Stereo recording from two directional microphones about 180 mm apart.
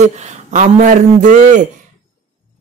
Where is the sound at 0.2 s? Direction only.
40° right (ahead or behind).